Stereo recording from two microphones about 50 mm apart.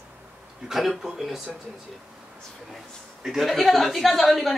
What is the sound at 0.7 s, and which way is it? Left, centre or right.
Speech, centre.